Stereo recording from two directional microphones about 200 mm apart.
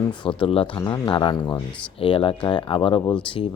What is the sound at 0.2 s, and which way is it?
Speech, 25° left (ahead or behind).